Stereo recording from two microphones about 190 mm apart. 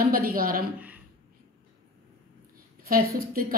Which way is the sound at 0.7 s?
10° right (ahead or behind).